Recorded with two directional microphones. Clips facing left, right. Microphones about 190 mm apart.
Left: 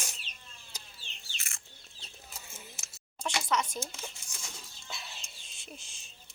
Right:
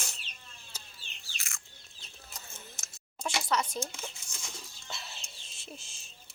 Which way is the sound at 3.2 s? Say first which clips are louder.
Even; centre (ahead or behind).